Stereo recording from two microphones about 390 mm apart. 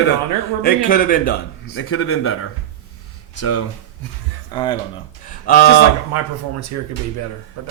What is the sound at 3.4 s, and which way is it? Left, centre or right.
Speech, left.